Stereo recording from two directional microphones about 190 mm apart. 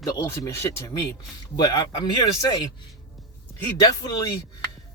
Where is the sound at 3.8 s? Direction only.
20° left (ahead or behind).